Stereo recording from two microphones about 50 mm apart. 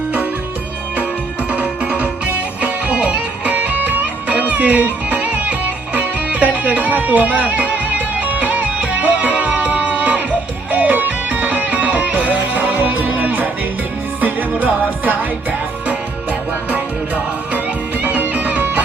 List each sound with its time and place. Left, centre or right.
1.5 s music: right
18.0 s music: right